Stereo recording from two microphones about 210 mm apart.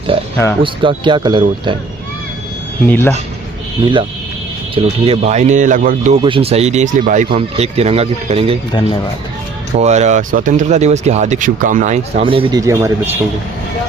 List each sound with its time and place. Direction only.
0.6 s speech: 25° right (ahead or behind)
2.8 s speech: 10° left (ahead or behind)
4.7 s speech: 25° right (ahead or behind)
6.2 s speech: 25° right (ahead or behind)
9.7 s speech: 30° right (ahead or behind)
12.2 s speech: 25° right (ahead or behind)